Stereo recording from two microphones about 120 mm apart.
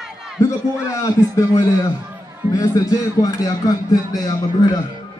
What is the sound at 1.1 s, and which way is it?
A man's voice, 25° left (ahead or behind).